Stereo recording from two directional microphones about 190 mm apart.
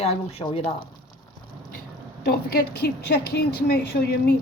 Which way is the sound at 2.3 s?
55° left (ahead or behind).